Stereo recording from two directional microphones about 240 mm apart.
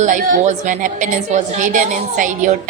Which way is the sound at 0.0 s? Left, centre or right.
Right.